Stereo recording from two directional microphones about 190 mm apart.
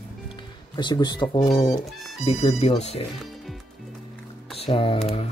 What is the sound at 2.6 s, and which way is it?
Speech, 35° left (ahead or behind).